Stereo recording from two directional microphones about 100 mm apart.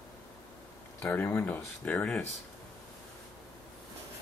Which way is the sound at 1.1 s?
25° left (ahead or behind).